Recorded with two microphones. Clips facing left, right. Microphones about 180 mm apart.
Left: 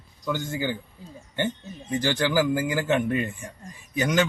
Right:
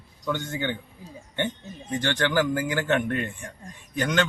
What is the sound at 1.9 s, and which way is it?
Speech, 5° left (ahead or behind).